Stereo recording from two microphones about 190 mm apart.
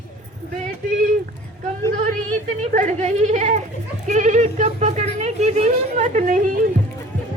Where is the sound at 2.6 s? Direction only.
40° right (ahead or behind).